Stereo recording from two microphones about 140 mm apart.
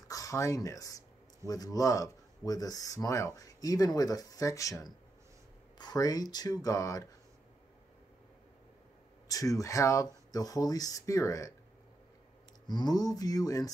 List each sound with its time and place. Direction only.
0.1 s speech: 25° left (ahead or behind)
9.3 s speech: 25° left (ahead or behind)
12.6 s speech: 30° left (ahead or behind)